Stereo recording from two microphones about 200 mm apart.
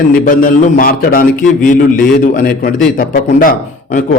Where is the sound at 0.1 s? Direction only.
45° left (ahead or behind).